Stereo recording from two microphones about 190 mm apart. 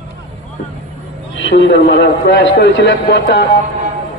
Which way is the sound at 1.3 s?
70° left (ahead or behind).